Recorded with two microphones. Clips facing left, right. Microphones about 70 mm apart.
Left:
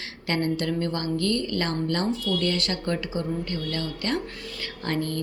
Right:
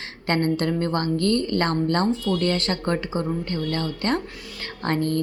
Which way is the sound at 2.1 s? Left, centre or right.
Right.